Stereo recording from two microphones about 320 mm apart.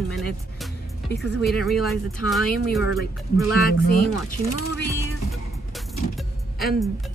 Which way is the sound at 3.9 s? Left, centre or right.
Left.